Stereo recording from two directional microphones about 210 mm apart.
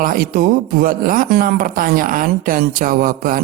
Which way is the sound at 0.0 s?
40° right (ahead or behind).